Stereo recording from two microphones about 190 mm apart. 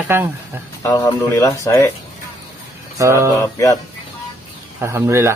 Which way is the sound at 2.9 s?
15° right (ahead or behind).